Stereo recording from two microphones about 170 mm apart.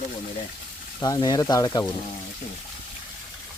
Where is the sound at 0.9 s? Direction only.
20° left (ahead or behind).